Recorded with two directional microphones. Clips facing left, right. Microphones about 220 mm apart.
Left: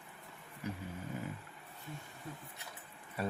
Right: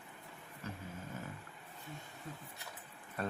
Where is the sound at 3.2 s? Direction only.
10° left (ahead or behind).